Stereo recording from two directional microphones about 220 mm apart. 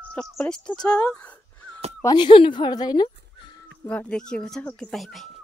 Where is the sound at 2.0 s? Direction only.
20° left (ahead or behind).